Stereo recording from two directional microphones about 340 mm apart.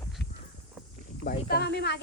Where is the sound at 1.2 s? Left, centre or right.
Left.